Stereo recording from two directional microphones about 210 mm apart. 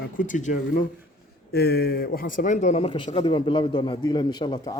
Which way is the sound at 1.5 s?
50° left (ahead or behind).